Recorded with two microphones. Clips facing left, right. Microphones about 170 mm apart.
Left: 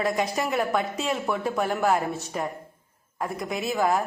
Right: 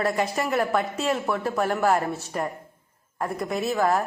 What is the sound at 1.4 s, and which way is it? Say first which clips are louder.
A woman's voice: right 1 dB; 10° left (ahead or behind).